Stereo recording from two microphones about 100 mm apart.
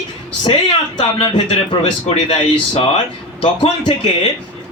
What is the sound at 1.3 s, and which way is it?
Speech, 50° left (ahead or behind).